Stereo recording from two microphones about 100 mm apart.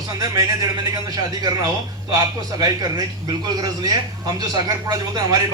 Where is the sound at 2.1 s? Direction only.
40° right (ahead or behind).